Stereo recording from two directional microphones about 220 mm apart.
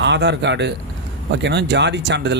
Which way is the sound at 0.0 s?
50° right (ahead or behind).